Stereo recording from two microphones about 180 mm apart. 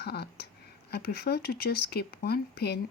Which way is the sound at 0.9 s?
60° left (ahead or behind).